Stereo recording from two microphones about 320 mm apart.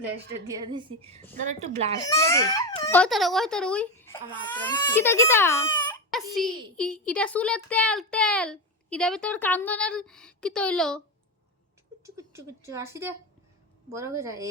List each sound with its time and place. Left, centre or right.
0.0 s a woman's voice: centre
2.0 s a child's voice: centre
12.0 s a woman's voice: centre